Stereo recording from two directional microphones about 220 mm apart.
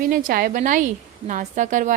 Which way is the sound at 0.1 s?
40° right (ahead or behind).